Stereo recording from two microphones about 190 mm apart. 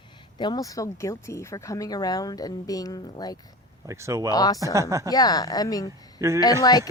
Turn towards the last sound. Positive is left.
turn(degrees=20)  # may be behind; listen again after turning